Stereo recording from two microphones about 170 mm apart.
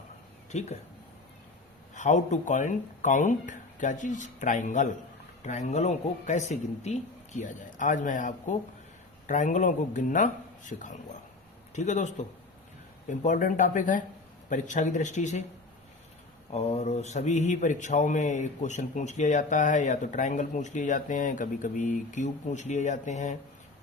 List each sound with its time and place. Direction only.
0.5 s speech: 40° left (ahead or behind)
2.0 s speech: 45° left (ahead or behind)
16.5 s speech: 40° left (ahead or behind)